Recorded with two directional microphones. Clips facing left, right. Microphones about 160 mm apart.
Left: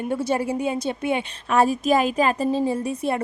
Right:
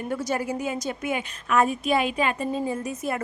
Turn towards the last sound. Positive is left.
turn(degrees=30)  # may be behind; listen again after turning